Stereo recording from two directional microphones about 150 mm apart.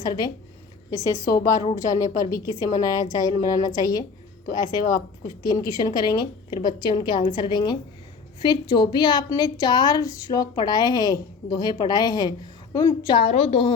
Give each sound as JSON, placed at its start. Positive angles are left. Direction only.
{"t": 0.0, "sound": "a woman's voice", "side_deg": 25}